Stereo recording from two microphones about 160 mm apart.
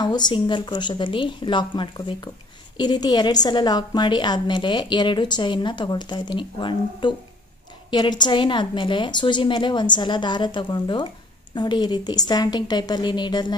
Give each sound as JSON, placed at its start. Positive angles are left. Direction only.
{"t": 0.0, "sound": "a woman's voice", "side_deg": 25}